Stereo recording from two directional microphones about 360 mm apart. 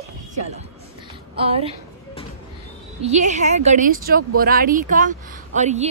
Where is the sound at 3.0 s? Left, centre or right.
Centre.